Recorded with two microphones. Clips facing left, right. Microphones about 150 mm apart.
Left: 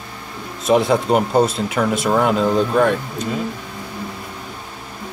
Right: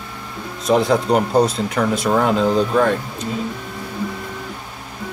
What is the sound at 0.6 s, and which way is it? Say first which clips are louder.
Speech: even; centre (ahead or behind).